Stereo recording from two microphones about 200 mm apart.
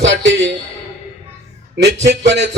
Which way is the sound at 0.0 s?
65° right (ahead or behind).